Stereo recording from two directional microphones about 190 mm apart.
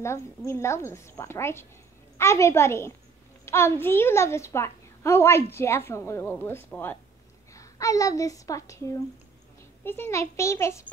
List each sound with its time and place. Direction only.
0.5 s a woman's voice: 15° left (ahead or behind)